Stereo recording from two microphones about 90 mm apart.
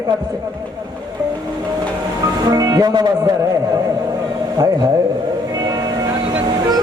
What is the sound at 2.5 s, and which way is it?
Speech, 45° right (ahead or behind).